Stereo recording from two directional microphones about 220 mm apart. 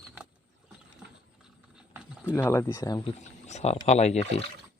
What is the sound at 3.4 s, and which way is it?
Speech, 30° left (ahead or behind).